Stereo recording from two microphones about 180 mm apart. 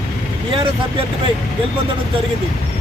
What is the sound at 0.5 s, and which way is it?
Speech, 30° right (ahead or behind).